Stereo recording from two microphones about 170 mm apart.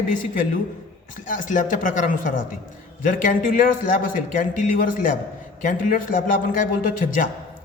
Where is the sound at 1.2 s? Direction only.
50° left (ahead or behind).